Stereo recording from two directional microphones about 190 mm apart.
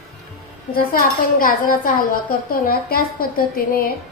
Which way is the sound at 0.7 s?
50° left (ahead or behind).